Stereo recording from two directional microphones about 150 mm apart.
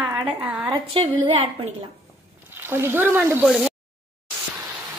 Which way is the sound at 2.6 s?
15° right (ahead or behind).